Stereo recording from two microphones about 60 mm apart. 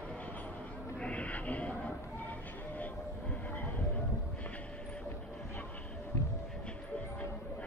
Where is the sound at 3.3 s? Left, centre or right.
Left.